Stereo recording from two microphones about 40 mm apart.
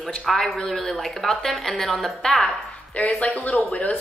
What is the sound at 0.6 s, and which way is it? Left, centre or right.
Speech, centre.